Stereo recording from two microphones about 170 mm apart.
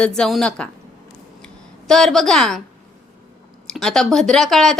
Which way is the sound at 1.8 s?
Centre (ahead or behind).